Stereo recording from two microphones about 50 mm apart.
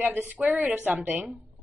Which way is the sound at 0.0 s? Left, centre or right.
Right.